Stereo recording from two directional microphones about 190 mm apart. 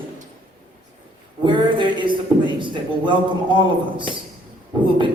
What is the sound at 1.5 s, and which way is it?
A man's voice, 25° right (ahead or behind).